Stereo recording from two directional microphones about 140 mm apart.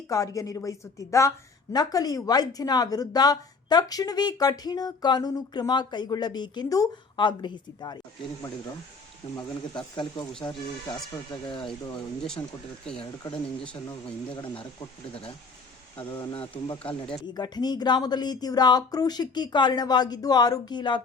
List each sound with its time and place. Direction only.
0.1 s speech: 25° left (ahead or behind)
9.3 s speech: 30° left (ahead or behind)
14.3 s speech: 35° left (ahead or behind)
16.6 s speech: 40° left (ahead or behind)